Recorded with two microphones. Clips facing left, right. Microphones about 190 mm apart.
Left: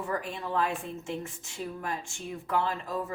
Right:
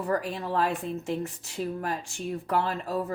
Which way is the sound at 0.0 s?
35° right (ahead or behind).